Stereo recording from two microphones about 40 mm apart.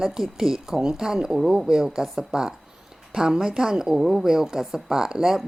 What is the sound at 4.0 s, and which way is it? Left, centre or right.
Speech, centre.